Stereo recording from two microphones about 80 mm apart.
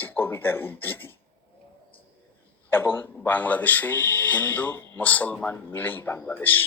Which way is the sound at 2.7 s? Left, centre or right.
Left.